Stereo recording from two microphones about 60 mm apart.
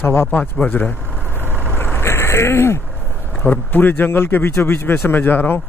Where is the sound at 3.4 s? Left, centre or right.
Left.